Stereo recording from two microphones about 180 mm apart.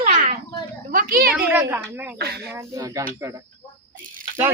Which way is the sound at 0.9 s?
55° right (ahead or behind).